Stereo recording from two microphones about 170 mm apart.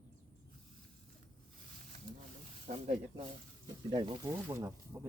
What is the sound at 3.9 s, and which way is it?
Speech, 30° right (ahead or behind).